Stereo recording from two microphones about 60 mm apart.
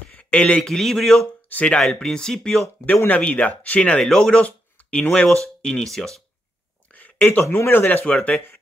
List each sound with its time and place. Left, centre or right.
0.1 s speech: centre
1.5 s speech: left
1.8 s speech: centre
3.1 s speech: left
4.0 s speech: centre
6.9 s a sound: left
7.5 s a man's voice: left
8.0 s speech: left